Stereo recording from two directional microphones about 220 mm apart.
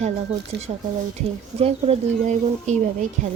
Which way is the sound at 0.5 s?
50° right (ahead or behind).